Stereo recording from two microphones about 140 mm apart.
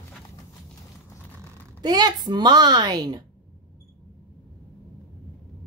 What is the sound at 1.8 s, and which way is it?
A woman's voice, 30° right (ahead or behind).